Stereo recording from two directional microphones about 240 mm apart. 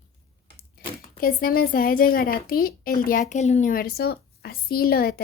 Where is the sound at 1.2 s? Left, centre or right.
Left.